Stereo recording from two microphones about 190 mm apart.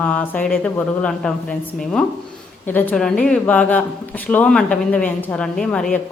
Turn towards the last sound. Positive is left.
turn(degrees=5)  # may be behind; listen again after turning